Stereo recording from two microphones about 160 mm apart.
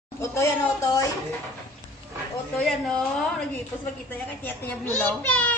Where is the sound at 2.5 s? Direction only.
Centre (ahead or behind).